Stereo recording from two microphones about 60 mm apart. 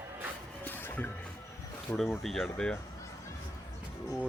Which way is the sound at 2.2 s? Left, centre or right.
Centre.